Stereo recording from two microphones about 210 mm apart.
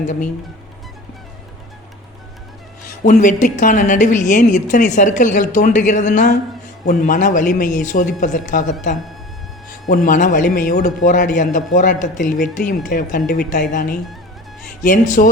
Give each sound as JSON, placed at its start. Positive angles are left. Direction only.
{"t": 3.1, "sound": "speech", "side_deg": 35}
{"t": 9.8, "sound": "speech", "side_deg": 40}